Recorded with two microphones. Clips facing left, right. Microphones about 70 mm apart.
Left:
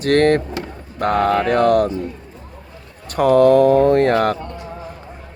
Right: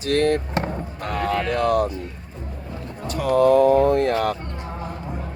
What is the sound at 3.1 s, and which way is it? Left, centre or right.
Mantra, left.